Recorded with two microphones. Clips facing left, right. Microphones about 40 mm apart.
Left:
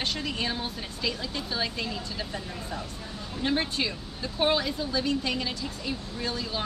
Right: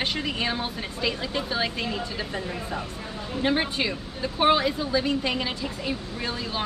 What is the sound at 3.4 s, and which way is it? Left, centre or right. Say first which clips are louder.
A woman's voice: right 3 dB; right.